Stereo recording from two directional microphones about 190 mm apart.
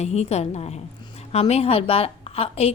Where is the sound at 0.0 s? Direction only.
35° left (ahead or behind).